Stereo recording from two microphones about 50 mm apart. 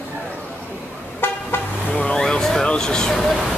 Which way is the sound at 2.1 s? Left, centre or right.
Centre.